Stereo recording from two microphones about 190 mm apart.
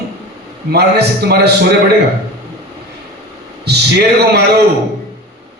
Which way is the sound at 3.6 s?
60° right (ahead or behind).